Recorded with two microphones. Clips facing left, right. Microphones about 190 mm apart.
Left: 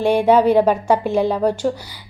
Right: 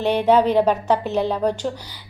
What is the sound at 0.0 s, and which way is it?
A woman's voice, 10° left (ahead or behind).